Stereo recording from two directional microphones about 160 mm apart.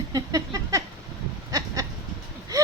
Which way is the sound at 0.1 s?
20° right (ahead or behind).